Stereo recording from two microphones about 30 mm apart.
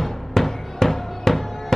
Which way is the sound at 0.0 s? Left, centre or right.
Centre.